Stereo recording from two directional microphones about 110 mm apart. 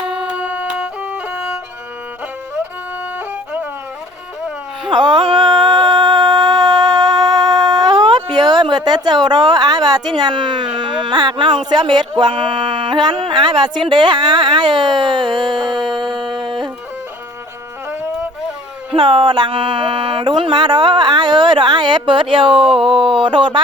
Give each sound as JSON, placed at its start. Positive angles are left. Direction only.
{"t": 0.3, "sound": "music", "side_deg": -10}
{"t": 3.2, "sound": "music", "side_deg": -15}
{"t": 4.9, "sound": "a sound", "side_deg": -45}
{"t": 10.2, "sound": "speech", "side_deg": -45}
{"t": 18.9, "sound": "speech", "side_deg": -50}